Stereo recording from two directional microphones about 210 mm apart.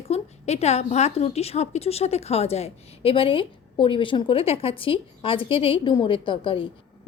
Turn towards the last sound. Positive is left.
turn(degrees=25)  # may be behind; listen again after turning